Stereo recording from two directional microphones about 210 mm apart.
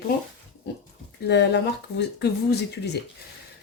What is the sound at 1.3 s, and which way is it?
Speech, 55° left (ahead or behind).